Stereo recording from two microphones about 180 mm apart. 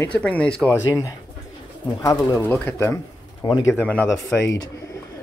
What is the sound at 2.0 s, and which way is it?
Speech, 15° left (ahead or behind).